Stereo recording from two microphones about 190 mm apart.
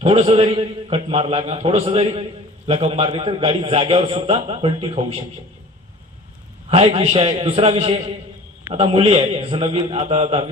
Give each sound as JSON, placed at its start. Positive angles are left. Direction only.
{"t": 0.0, "sound": "a man's voice", "side_deg": -30}
{"t": 6.7, "sound": "a man's voice", "side_deg": -30}